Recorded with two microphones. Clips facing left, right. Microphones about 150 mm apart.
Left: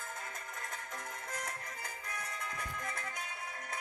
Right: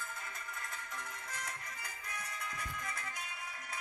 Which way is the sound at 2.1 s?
50° left (ahead or behind).